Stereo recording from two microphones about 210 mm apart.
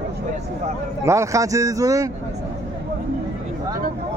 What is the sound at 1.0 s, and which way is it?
Speech, 15° right (ahead or behind).